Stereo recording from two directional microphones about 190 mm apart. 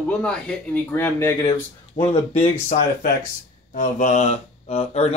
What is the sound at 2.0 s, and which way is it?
Speech, 35° left (ahead or behind).